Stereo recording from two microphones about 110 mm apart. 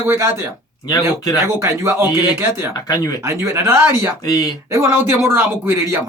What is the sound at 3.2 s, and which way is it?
Speech, 25° right (ahead or behind).